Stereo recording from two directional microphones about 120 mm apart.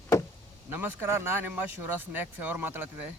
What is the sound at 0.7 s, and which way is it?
Speech, 15° right (ahead or behind).